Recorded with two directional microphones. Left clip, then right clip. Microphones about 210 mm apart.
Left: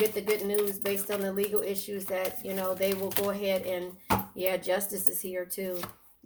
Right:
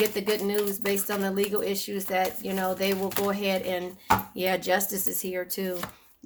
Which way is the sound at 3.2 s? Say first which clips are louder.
Right 1 dB; 35° right (ahead or behind).